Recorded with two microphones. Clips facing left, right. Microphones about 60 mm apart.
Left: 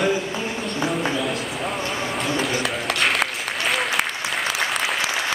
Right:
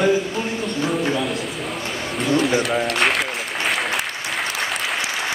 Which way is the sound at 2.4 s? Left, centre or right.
Centre.